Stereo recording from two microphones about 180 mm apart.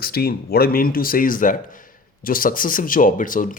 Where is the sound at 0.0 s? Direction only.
60° left (ahead or behind).